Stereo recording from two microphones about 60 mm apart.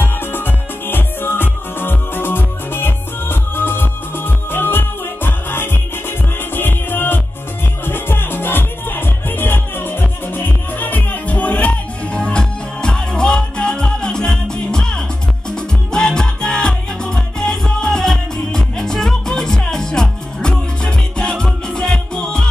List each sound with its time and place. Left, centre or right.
0.0 s music: left; by 22.5 s centre